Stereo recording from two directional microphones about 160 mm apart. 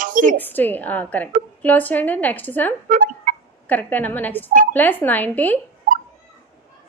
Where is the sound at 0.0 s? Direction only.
55° right (ahead or behind).